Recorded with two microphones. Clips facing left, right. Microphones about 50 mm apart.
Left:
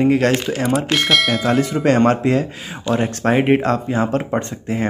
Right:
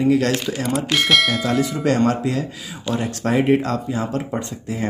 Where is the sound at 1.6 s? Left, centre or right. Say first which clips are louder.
Left 4 dB; left.